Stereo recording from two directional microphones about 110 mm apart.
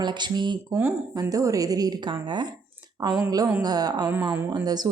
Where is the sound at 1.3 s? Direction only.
30° right (ahead or behind).